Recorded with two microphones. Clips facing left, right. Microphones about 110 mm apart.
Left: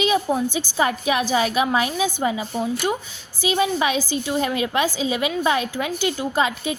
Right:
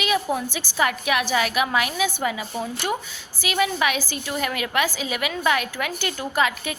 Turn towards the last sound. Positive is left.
turn(degrees=25)  # may be behind; listen again after turning